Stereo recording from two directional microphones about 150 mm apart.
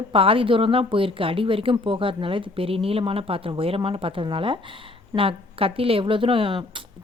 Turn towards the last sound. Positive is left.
turn(degrees=-35)  # may be behind; listen again after turning